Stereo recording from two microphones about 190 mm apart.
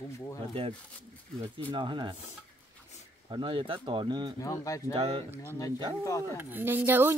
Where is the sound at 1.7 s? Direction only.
25° right (ahead or behind).